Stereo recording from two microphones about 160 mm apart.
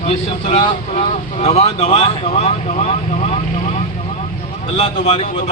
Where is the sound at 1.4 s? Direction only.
40° left (ahead or behind).